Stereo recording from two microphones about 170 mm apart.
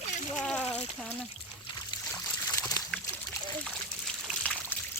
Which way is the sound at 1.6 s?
25° left (ahead or behind).